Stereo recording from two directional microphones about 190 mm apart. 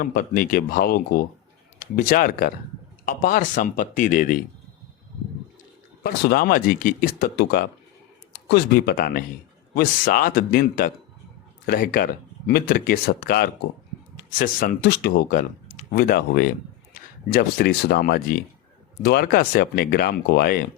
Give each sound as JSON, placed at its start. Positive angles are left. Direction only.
{"t": 0.0, "sound": "speech", "side_deg": 50}
{"t": 6.0, "sound": "speech", "side_deg": 55}